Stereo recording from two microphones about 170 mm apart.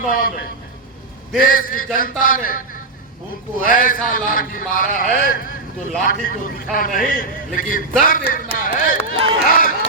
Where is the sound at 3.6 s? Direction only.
55° left (ahead or behind).